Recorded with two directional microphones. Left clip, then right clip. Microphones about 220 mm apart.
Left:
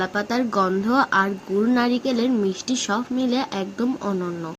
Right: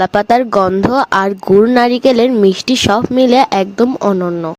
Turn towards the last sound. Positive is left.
turn(degrees=-35)  # may be behind; listen again after turning